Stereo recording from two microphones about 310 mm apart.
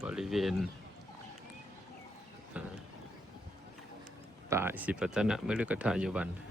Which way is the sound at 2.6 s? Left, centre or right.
Centre.